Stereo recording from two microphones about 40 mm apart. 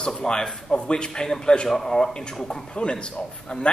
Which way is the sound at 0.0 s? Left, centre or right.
Centre.